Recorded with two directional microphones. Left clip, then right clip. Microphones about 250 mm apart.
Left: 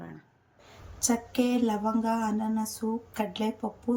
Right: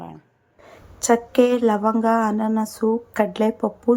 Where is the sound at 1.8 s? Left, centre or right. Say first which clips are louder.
Right 10 dB; right.